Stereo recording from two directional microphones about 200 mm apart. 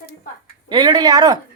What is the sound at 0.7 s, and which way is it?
Speech, 20° right (ahead or behind).